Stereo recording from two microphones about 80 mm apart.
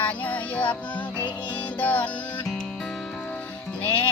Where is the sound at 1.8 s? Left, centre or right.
Centre.